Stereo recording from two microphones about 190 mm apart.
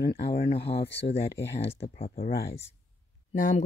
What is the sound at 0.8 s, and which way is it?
Speech, 65° left (ahead or behind).